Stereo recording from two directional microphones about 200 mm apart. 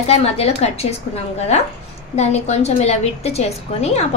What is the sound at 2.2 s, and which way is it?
A woman's voice, 35° left (ahead or behind).